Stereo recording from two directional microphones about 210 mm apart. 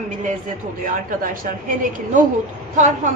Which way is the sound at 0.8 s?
40° right (ahead or behind).